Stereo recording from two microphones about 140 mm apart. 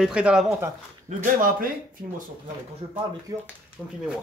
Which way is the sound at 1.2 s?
75° right (ahead or behind).